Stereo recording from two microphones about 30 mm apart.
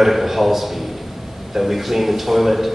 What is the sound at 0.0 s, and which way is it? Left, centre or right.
A man's voice, centre.